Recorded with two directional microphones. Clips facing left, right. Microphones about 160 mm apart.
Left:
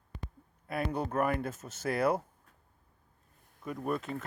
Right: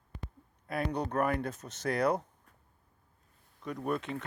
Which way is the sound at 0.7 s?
5° left (ahead or behind).